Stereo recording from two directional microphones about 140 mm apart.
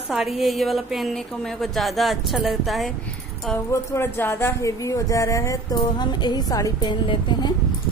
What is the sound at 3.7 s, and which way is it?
A woman's voice, 20° left (ahead or behind).